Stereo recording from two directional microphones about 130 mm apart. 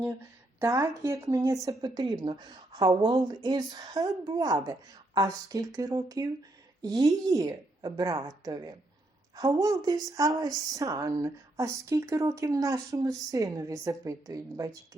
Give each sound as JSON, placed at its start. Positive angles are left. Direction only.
{"t": 0.6, "sound": "speech", "side_deg": -25}